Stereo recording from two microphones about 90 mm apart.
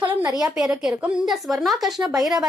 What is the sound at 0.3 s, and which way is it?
A woman's voice, 5° right (ahead or behind).